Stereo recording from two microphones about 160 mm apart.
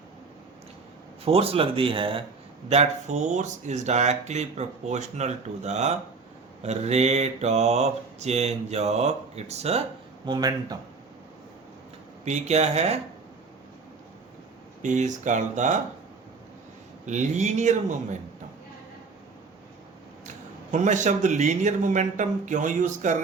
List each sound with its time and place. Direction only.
1.2 s speech: 35° right (ahead or behind)
2.6 s speech: 45° right (ahead or behind)
10.2 s speech: 25° right (ahead or behind)
12.2 s speech: 45° right (ahead or behind)
14.8 s speech: 50° right (ahead or behind)
17.1 s speech: 50° right (ahead or behind)
20.2 s speech: 50° right (ahead or behind)